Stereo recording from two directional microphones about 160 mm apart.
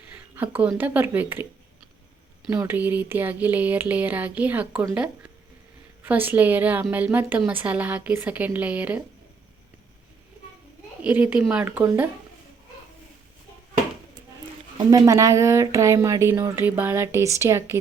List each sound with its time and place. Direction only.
0.1 s speech: 10° right (ahead or behind)
2.6 s speech: 10° right (ahead or behind)
6.0 s speech: 10° right (ahead or behind)
11.0 s speech: 10° right (ahead or behind)
14.8 s speech: 25° right (ahead or behind)